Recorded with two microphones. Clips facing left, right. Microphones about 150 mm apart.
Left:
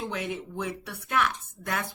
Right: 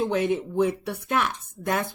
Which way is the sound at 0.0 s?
25° right (ahead or behind).